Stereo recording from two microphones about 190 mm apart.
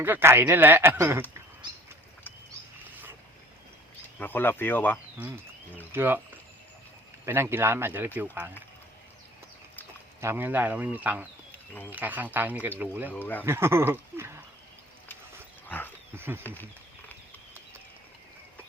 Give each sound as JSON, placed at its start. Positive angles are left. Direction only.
{"t": 0.0, "sound": "speech", "side_deg": -10}
{"t": 1.6, "sound": "a sound", "side_deg": -25}
{"t": 2.9, "sound": "a sound", "side_deg": -10}
{"t": 4.2, "sound": "speech", "side_deg": 10}
{"t": 5.9, "sound": "speech", "side_deg": -10}
{"t": 7.3, "sound": "speech", "side_deg": -10}
{"t": 10.2, "sound": "speech", "side_deg": -10}
{"t": 13.1, "sound": "speech", "side_deg": 10}
{"t": 13.4, "sound": "speech", "side_deg": -15}
{"t": 15.6, "sound": "dog", "side_deg": 10}
{"t": 16.1, "sound": "speech", "side_deg": -10}
{"t": 16.4, "sound": "speech", "side_deg": 10}